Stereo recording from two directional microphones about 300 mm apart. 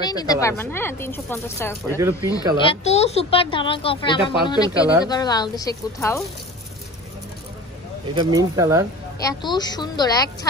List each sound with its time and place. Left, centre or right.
0.0 s speech: centre
8.4 s speech: centre
9.2 s speech: centre